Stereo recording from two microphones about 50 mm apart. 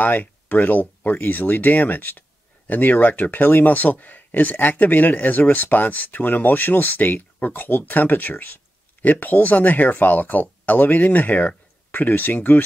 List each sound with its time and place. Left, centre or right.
0.0 s speech: left